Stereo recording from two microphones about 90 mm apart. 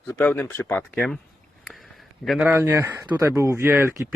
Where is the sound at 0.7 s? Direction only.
15° left (ahead or behind).